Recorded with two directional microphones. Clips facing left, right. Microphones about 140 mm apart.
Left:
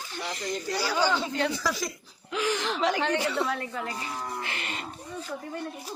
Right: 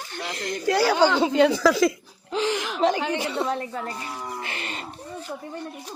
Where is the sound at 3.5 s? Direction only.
35° right (ahead or behind).